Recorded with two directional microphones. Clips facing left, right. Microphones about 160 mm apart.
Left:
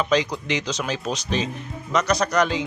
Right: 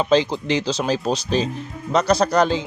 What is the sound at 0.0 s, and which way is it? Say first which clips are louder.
Speech: right 4 dB; 30° right (ahead or behind).